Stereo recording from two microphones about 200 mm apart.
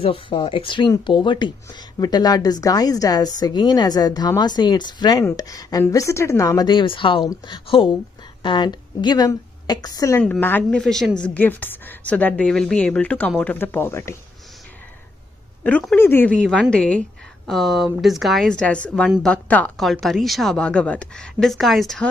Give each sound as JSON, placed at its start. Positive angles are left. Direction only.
{"t": 0.0, "sound": "a woman's voice", "side_deg": 25}
{"t": 10.2, "sound": "a woman's voice", "side_deg": 5}
{"t": 15.6, "sound": "a woman's voice", "side_deg": 5}